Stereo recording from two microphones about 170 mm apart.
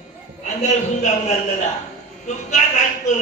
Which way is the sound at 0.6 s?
45° left (ahead or behind).